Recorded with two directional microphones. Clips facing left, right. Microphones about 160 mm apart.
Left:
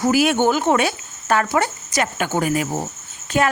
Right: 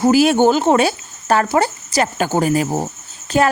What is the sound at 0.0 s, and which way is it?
Speech, 30° right (ahead or behind).